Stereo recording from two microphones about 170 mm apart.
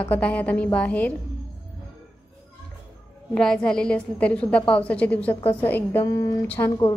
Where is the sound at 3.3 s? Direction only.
5° left (ahead or behind).